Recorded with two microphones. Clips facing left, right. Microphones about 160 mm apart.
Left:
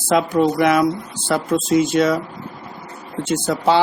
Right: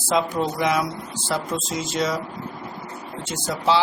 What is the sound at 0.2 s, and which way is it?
Speech, 60° left (ahead or behind).